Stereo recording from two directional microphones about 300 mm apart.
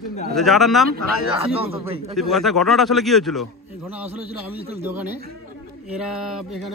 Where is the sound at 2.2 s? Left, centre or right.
Centre.